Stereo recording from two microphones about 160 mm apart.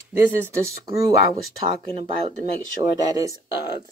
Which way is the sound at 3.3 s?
25° left (ahead or behind).